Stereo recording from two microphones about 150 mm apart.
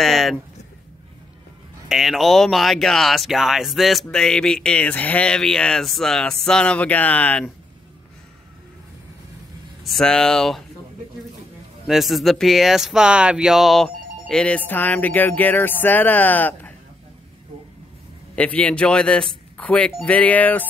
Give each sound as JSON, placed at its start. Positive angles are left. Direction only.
{"t": 0.0, "sound": "speech", "side_deg": 0}
{"t": 1.9, "sound": "speech", "side_deg": 0}
{"t": 9.8, "sound": "speech", "side_deg": 5}
{"t": 11.9, "sound": "speech", "side_deg": 0}
{"t": 18.3, "sound": "speech", "side_deg": 10}